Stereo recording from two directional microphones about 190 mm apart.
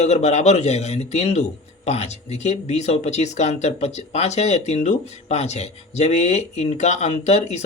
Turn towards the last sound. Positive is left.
turn(degrees=35)  # may be behind; listen again after turning